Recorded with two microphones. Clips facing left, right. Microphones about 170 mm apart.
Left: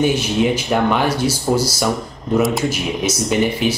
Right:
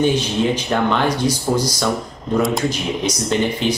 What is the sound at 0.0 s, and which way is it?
Speech, 10° left (ahead or behind).